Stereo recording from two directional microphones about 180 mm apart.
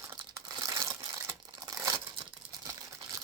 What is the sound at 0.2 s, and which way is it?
Crumpling, 20° right (ahead or behind).